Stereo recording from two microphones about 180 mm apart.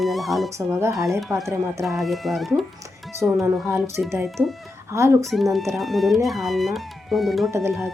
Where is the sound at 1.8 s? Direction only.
Centre (ahead or behind).